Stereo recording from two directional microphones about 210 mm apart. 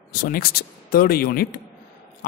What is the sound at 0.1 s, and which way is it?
Speech, 45° left (ahead or behind).